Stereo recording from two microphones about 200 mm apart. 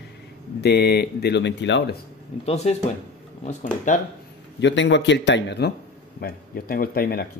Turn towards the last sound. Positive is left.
turn(degrees=50)  # may be behind; listen again after turning